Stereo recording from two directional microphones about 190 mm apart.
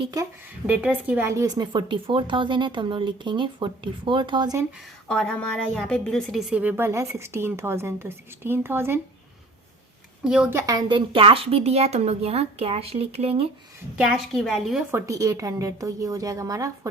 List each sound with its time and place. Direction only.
0.0 s speech: 20° right (ahead or behind)
0.7 s speech: 5° right (ahead or behind)
5.0 s a woman's voice: 5° left (ahead or behind); by 9.0 s 10° right (ahead or behind)
10.2 s a woman's voice: 5° right (ahead or behind); by 13.4 s 30° right (ahead or behind)
13.9 s a woman's voice: 5° right (ahead or behind)
14.9 s a woman's voice: 15° right (ahead or behind)